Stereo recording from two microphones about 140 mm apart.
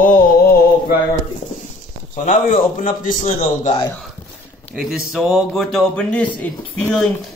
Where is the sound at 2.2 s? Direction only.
75° left (ahead or behind).